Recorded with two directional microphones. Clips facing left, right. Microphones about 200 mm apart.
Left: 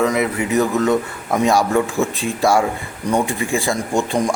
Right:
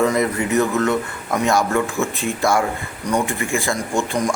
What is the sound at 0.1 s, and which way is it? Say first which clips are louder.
Speech: even; 10° left (ahead or behind).